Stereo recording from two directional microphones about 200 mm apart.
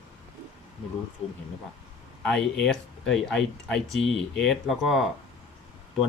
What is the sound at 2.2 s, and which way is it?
Speech, 5° left (ahead or behind).